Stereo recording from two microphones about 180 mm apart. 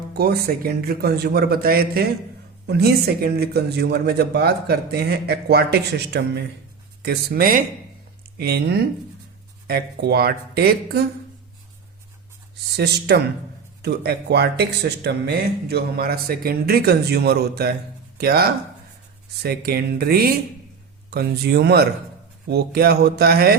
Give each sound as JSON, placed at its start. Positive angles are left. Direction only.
{"t": 0.1, "sound": "speech", "side_deg": -60}
{"t": 12.7, "sound": "speech", "side_deg": -65}